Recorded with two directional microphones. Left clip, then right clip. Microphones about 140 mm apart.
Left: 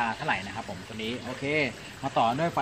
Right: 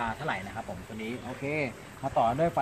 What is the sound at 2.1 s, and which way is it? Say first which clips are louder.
Speech: even; 25° right (ahead or behind).